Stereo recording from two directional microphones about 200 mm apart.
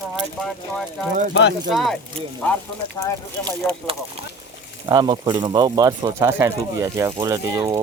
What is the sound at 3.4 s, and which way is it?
Speech, 30° right (ahead or behind).